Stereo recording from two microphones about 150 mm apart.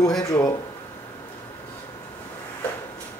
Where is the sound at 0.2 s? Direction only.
25° left (ahead or behind).